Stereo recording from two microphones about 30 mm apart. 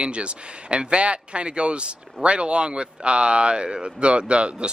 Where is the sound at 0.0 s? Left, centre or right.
Right.